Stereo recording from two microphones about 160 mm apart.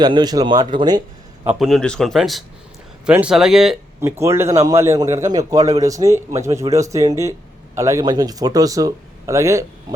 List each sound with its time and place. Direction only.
0.0 s a man's voice: 25° right (ahead or behind)
1.5 s speech: centre (ahead or behind)
4.0 s a man's voice: 15° right (ahead or behind)